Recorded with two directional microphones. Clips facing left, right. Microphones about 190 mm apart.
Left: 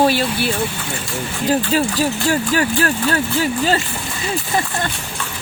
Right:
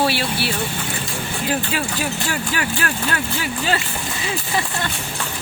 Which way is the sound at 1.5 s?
40° left (ahead or behind).